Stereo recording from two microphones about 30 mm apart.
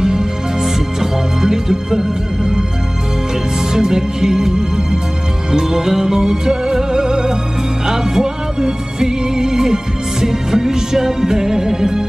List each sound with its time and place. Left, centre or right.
0.0 s music: right
3.8 s music: centre